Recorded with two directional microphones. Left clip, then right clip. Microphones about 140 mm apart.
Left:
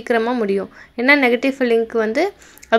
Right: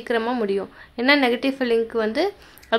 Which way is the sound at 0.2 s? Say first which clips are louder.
Left 4 dB; 20° left (ahead or behind).